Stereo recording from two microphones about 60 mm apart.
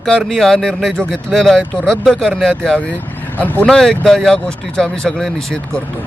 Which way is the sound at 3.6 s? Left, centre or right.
Centre.